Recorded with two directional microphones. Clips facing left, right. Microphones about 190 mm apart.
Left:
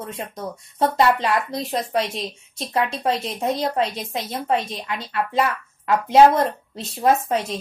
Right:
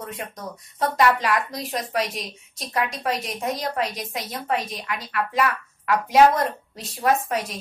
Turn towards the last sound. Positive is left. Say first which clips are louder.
# left 3 dB
turn(degrees=25)  # may be behind; listen again after turning